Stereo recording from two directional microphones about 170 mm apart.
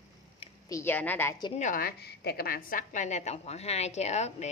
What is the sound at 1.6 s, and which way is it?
A woman's voice, 60° left (ahead or behind).